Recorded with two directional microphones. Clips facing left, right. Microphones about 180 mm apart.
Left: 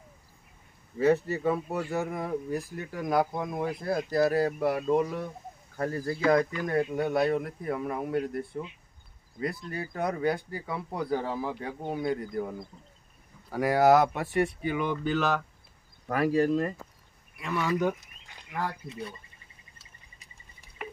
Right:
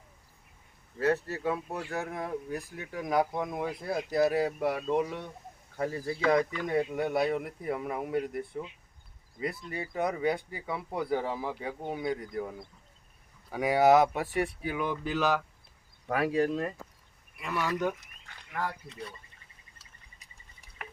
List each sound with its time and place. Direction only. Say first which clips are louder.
0.9 s speech: left 4 dB; centre (ahead or behind)